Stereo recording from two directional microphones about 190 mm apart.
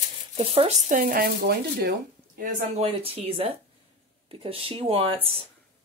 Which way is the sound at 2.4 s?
30° right (ahead or behind).